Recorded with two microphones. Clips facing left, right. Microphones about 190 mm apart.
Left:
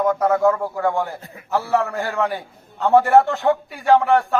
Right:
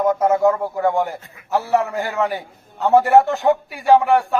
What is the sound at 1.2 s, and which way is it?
Speech, 35° left (ahead or behind).